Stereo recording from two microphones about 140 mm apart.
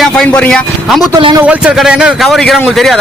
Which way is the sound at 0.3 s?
10° left (ahead or behind).